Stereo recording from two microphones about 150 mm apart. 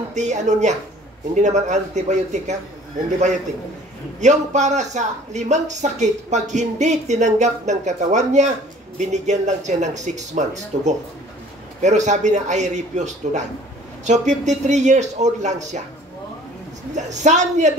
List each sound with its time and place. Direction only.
0.1 s speech: 50° right (ahead or behind)
16.9 s speech: 50° right (ahead or behind)